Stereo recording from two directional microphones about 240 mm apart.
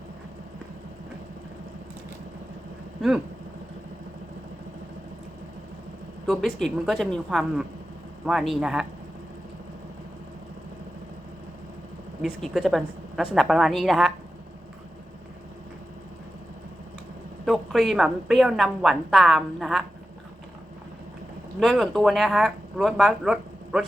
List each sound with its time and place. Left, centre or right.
6.2 s a woman's voice: centre
12.2 s a woman's voice: centre
17.4 s a woman's voice: centre
21.6 s a woman's voice: centre